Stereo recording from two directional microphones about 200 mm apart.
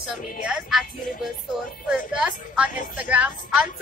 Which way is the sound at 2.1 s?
5° right (ahead or behind).